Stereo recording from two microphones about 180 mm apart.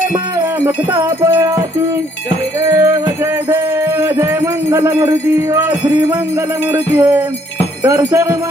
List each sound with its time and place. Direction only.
0.6 s music: 25° right (ahead or behind)
2.7 s music: 15° right (ahead or behind)
6.9 s jingle bell: 10° right (ahead or behind)